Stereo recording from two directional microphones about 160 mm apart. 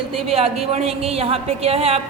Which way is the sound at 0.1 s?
40° right (ahead or behind).